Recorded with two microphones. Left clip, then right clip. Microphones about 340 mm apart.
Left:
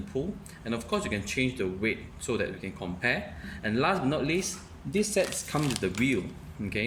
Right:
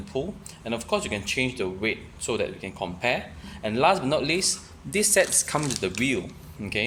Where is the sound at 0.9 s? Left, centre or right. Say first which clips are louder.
Right 5 dB; centre.